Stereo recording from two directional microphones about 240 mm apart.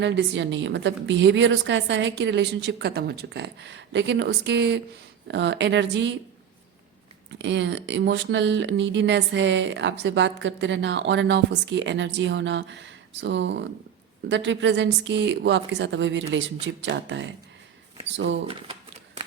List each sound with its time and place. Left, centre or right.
0.0 s speech: right
7.3 s speech: right
18.4 s shuffling cards: right